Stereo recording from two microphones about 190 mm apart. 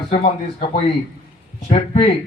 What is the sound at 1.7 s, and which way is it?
Speech, 35° left (ahead or behind).